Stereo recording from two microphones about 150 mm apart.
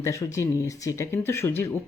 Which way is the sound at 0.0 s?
20° left (ahead or behind).